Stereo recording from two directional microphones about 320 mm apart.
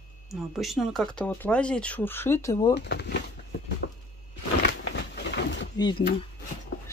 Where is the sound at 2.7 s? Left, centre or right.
Left.